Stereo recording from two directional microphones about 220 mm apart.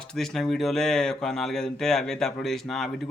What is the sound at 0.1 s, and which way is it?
Speech, centre (ahead or behind).